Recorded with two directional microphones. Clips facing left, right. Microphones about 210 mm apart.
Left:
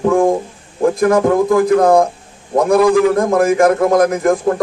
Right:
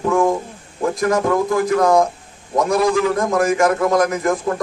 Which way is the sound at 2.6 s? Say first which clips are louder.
Left 6 dB; 55° left (ahead or behind).